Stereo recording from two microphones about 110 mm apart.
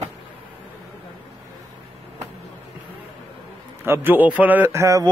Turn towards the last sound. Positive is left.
turn(degrees=-25)  # may be behind; listen again after turning